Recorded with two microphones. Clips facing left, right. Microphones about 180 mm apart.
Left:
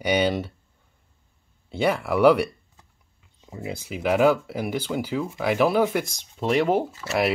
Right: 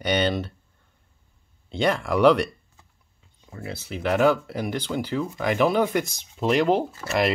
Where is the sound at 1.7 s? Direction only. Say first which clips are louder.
Even; 5° left (ahead or behind).